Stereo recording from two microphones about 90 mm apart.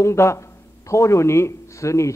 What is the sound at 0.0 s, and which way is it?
A man's voice, 30° left (ahead or behind).